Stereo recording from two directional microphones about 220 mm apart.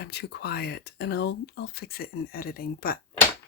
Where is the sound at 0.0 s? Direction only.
50° left (ahead or behind).